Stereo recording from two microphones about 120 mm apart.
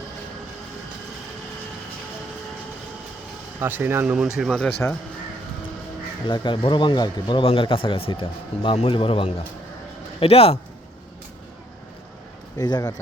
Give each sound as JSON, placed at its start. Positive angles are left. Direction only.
{"t": 3.6, "sound": "speech", "side_deg": -15}
{"t": 4.4, "sound": "speech", "side_deg": 5}
{"t": 6.2, "sound": "a man's voice", "side_deg": 40}
{"t": 12.5, "sound": "speech", "side_deg": 35}